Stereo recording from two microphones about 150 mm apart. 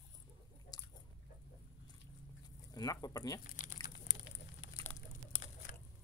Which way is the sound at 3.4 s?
65° left (ahead or behind).